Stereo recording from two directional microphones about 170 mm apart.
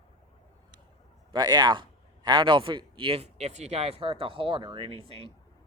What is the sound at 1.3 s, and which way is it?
Speech, 25° right (ahead or behind).